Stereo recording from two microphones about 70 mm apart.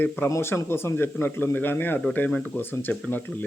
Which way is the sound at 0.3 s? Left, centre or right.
Left.